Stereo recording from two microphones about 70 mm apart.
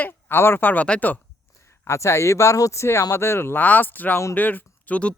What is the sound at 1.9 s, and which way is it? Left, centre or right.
Speech, left.